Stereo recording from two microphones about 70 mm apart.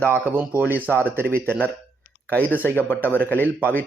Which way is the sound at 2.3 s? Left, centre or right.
Left.